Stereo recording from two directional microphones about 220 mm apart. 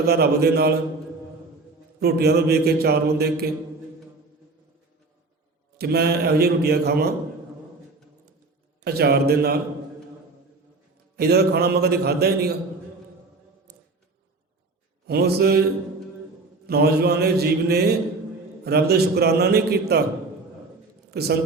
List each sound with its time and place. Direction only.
0.0 s speech: 45° right (ahead or behind)
2.0 s speech: 45° right (ahead or behind)
5.7 s speech: 45° right (ahead or behind)
8.8 s speech: 45° right (ahead or behind)
11.2 s speech: 45° right (ahead or behind)
15.0 s speech: 45° right (ahead or behind)
16.6 s speech: 45° right (ahead or behind)
21.1 s a man's voice: 45° right (ahead or behind)